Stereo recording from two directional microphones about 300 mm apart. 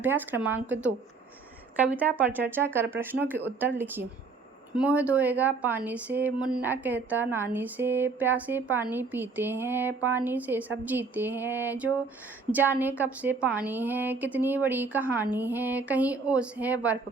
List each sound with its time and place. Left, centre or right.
0.0 s a woman's voice: centre